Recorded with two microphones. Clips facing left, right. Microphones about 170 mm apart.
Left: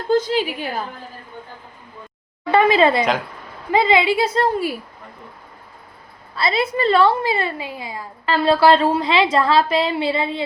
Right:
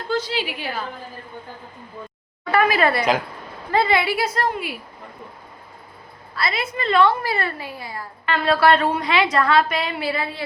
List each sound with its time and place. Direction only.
0.1 s a woman's voice: 50° left (ahead or behind)
2.5 s a woman's voice: 25° left (ahead or behind)
6.3 s a woman's voice: 30° left (ahead or behind)
8.3 s a woman's voice: 30° left (ahead or behind)